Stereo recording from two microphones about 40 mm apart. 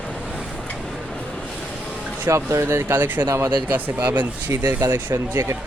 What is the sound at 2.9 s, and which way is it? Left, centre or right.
Speech, right.